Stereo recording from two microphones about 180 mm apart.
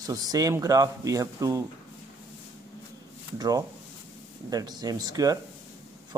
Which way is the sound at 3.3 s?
20° right (ahead or behind).